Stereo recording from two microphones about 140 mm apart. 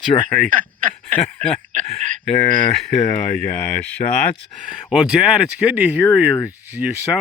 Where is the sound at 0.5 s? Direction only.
70° right (ahead or behind).